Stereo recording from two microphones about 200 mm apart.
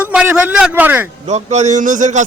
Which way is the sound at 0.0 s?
5° right (ahead or behind).